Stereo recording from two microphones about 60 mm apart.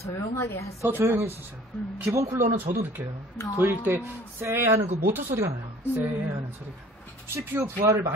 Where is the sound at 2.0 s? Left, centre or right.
Right.